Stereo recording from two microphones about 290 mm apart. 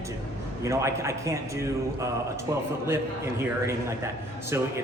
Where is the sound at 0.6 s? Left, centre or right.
Centre.